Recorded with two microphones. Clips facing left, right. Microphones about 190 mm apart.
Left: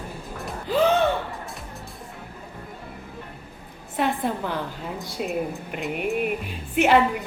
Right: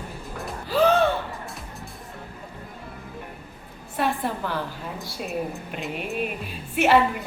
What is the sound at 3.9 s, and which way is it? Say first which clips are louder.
A woman's voice: left 1 dB; 20° left (ahead or behind).